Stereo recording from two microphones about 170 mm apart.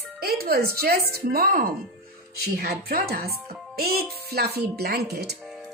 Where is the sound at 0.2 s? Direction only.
65° right (ahead or behind).